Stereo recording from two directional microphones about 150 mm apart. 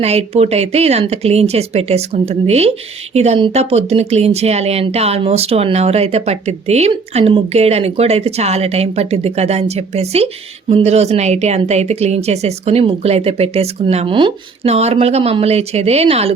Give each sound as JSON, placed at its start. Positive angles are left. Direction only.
{"t": 0.0, "sound": "speech", "side_deg": -45}